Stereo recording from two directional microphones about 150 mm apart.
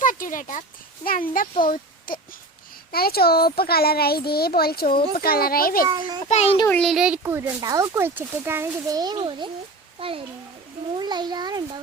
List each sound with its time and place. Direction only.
0.0 s a sound: 60° left (ahead or behind)
1.0 s speech: 70° left (ahead or behind)
2.9 s a child's voice: 90° left
5.9 s a child's voice: 30° right (ahead or behind)
6.2 s a child's voice: 45° left (ahead or behind)
6.7 s a child's voice: 10° left (ahead or behind)
6.9 s speech: 5° right (ahead or behind)
7.2 s a child's voice: 15° right (ahead or behind); by 9.5 s 30° right (ahead or behind)
10.9 s a child's voice: 30° right (ahead or behind)